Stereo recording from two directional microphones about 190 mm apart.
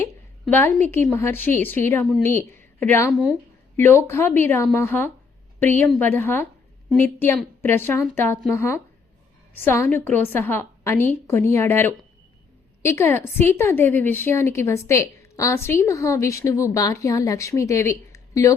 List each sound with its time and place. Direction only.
0.4 s a woman's voice: 5° left (ahead or behind)
15.2 s a sound: 15° left (ahead or behind)
15.8 s a woman's voice: 15° left (ahead or behind)